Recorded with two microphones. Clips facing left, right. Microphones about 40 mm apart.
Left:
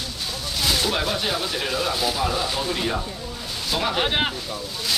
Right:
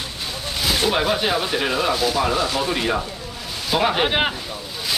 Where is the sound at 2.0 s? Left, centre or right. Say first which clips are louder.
Right 4 dB; centre.